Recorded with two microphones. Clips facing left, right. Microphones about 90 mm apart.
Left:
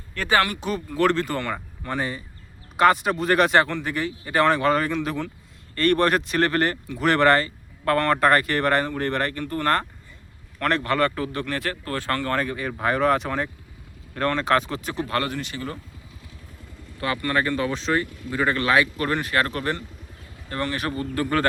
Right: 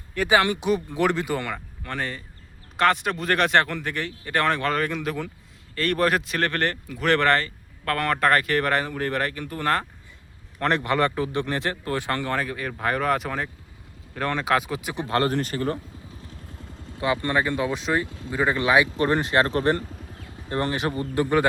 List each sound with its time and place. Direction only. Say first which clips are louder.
0.1 s speech: right 1 dB; 10° right (ahead or behind)
1.5 s speech: left 3 dB; 10° left (ahead or behind)
9.4 s speech: left 2 dB; 15° right (ahead or behind)
12.4 s speech: left 2 dB; centre (ahead or behind)
15.0 s speech: right 4 dB; 25° right (ahead or behind)
15.3 s speech: right 6 dB; 45° right (ahead or behind)
17.0 s speech: right 1 dB; 20° right (ahead or behind)
18.1 s speech: left 1 dB; 25° right (ahead or behind)
18.3 s speech: even; 15° right (ahead or behind)
18.9 s speech: right 3 dB; 30° right (ahead or behind)